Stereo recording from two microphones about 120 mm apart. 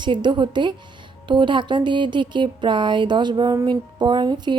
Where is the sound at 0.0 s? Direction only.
40° right (ahead or behind).